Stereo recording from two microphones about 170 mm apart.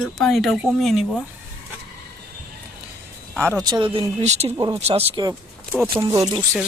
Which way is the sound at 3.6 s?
25° right (ahead or behind).